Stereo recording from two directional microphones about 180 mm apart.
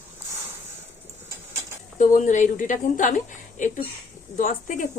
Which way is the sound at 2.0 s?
45° left (ahead or behind).